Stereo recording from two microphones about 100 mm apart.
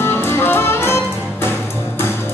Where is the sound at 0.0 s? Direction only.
25° left (ahead or behind).